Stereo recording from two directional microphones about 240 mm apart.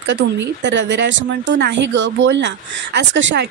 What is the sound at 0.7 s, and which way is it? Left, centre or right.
A woman's voice, right.